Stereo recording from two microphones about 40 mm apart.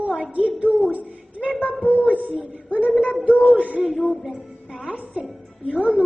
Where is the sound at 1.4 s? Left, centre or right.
Left.